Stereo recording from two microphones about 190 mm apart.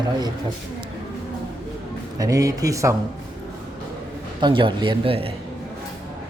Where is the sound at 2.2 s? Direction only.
20° right (ahead or behind).